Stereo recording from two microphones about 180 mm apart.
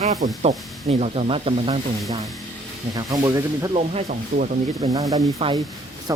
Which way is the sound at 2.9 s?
20° right (ahead or behind).